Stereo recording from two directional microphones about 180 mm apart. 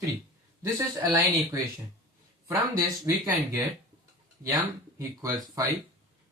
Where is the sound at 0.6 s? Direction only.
15° right (ahead or behind).